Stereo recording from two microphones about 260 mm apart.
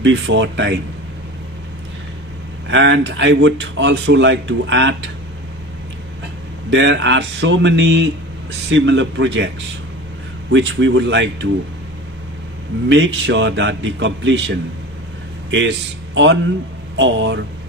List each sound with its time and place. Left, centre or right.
0.0 s speech: right
2.6 s speech: right
6.7 s speech: right
10.5 s speech: right
12.9 s speech: right